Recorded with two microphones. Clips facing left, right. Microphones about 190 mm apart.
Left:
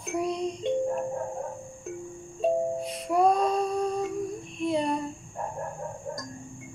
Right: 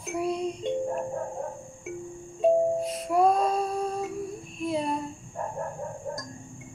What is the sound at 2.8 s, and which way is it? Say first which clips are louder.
Music: right 1 dB; centre (ahead or behind).